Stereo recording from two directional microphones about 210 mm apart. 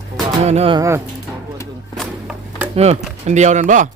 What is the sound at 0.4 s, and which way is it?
Speech, 30° right (ahead or behind).